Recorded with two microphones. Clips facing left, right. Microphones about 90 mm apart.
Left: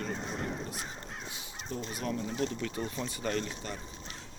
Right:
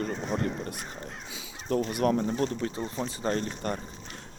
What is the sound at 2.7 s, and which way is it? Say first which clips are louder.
Speech: right 3 dB; 25° right (ahead or behind).